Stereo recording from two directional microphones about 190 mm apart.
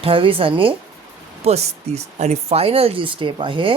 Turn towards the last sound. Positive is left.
turn(degrees=-25)  # may be behind; listen again after turning